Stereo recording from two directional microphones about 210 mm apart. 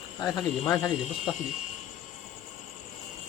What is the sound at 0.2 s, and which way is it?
Speech, 20° left (ahead or behind).